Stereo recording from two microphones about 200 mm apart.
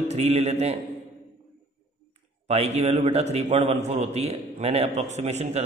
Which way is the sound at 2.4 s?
30° right (ahead or behind).